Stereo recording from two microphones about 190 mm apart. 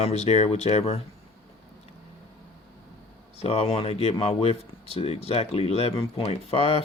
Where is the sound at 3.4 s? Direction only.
30° left (ahead or behind).